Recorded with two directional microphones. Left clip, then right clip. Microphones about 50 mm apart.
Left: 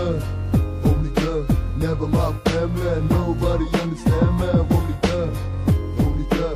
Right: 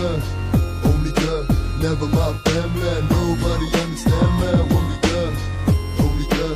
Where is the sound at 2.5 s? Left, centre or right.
Left.